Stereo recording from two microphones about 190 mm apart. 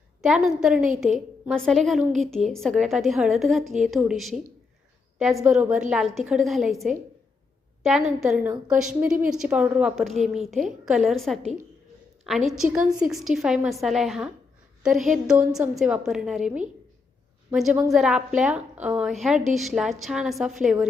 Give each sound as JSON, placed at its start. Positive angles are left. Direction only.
{"t": 0.2, "sound": "a woman's voice", "side_deg": 0}
{"t": 5.5, "sound": "a woman's voice", "side_deg": -5}